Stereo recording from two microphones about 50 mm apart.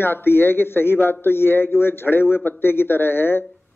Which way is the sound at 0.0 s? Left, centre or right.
Left.